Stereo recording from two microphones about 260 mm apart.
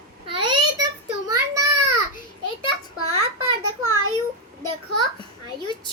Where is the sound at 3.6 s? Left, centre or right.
Right.